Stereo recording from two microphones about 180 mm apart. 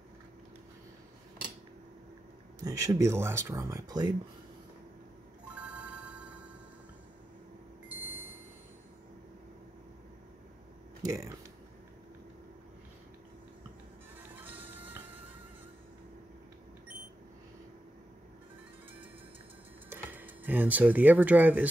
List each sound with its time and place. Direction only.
2.6 s speech: 20° right (ahead or behind)
5.5 s ringtone: 5° right (ahead or behind)
7.9 s a sound: 10° right (ahead or behind)
11.0 s speech: 15° right (ahead or behind)
14.2 s music: 10° right (ahead or behind)
19.9 s speech: 10° right (ahead or behind)